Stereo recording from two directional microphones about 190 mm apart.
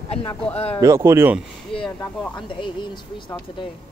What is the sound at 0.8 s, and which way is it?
Speech, 15° right (ahead or behind).